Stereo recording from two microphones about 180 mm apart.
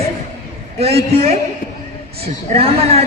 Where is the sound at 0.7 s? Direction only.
35° right (ahead or behind).